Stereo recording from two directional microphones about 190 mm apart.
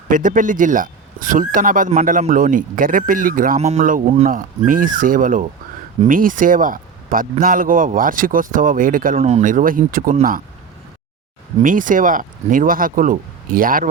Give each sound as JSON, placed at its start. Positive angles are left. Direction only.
{"t": 0.1, "sound": "speech", "side_deg": -45}
{"t": 9.1, "sound": "speech", "side_deg": -35}
{"t": 11.6, "sound": "speech", "side_deg": -45}